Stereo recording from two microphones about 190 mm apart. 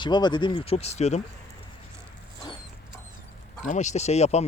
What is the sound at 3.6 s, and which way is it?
Speech, 40° left (ahead or behind).